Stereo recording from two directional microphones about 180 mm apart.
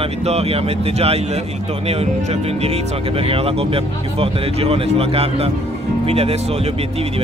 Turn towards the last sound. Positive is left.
turn(degrees=-35)  # may be behind; listen again after turning